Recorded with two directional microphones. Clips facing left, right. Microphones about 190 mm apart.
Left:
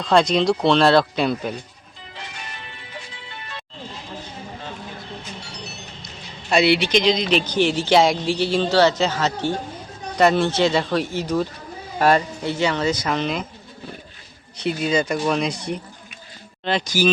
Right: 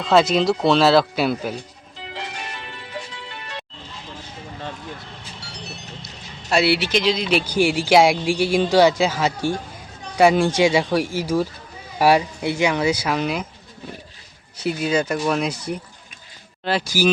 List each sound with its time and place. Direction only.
0.0 s speech: 5° right (ahead or behind)
2.0 s music: 75° right (ahead or behind)
6.5 s a man's voice: 5° right (ahead or behind)
14.6 s a man's voice: 5° right (ahead or behind)